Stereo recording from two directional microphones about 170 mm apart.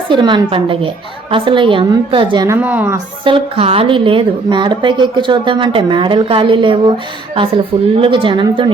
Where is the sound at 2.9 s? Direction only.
30° right (ahead or behind).